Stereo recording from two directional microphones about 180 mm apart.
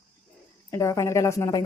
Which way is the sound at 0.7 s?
15° left (ahead or behind).